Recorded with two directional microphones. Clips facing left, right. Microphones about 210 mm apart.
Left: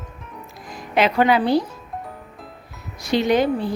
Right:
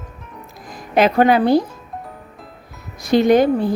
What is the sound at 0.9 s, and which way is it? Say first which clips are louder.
Speech: right 4 dB; 45° right (ahead or behind).